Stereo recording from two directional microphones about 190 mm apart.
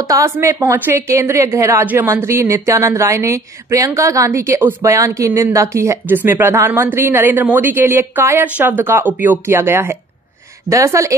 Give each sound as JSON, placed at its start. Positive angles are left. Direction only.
{"t": 0.1, "sound": "a woman's voice", "side_deg": -15}